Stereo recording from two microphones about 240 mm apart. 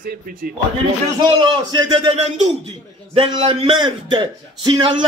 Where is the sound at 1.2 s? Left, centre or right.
Centre.